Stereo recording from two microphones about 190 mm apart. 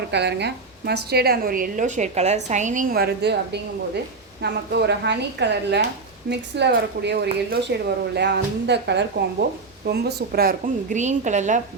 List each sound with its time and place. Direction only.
0.1 s a woman's voice: 65° right (ahead or behind); by 11.6 s 40° right (ahead or behind)